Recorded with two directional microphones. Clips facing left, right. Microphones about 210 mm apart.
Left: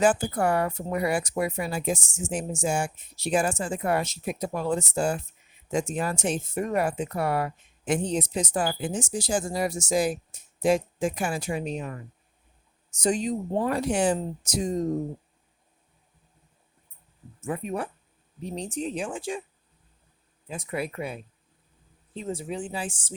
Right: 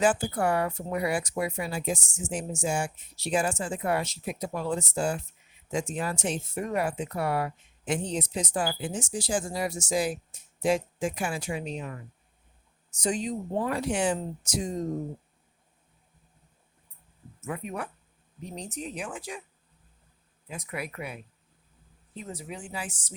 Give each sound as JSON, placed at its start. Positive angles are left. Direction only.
{"t": 0.0, "sound": "speech", "side_deg": 45}
{"t": 13.0, "sound": "speech", "side_deg": 40}
{"t": 17.4, "sound": "speech", "side_deg": 30}
{"t": 20.5, "sound": "speech", "side_deg": 30}